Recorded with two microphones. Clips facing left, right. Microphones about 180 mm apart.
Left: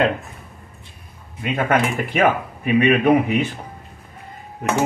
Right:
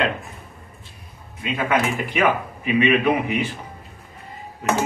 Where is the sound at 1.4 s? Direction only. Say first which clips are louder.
Left 2 dB; 50° left (ahead or behind).